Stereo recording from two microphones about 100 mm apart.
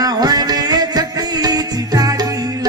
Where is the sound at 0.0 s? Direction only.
40° right (ahead or behind).